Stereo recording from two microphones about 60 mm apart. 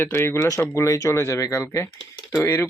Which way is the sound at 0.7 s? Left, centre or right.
Left.